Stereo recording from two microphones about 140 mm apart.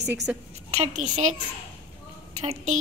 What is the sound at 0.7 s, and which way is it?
Speech, 55° right (ahead or behind).